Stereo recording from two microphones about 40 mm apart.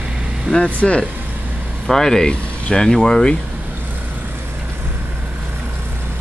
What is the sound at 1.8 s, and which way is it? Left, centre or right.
Speech, centre.